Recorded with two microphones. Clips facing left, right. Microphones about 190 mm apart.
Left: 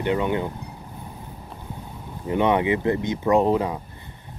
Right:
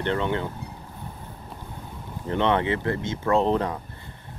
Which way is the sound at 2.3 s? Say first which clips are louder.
Left 3 dB; 10° left (ahead or behind).